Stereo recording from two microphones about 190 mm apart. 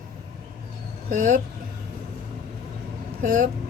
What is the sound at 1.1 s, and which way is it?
Speech, 45° right (ahead or behind).